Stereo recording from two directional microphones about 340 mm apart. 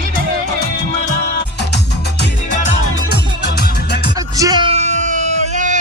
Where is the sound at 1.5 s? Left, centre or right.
Left.